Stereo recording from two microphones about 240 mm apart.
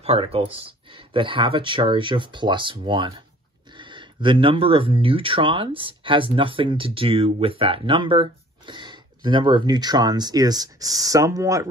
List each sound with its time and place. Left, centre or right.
0.0 s speech: right